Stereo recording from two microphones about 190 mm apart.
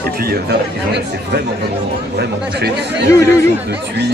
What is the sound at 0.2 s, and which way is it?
Speech, 55° right (ahead or behind).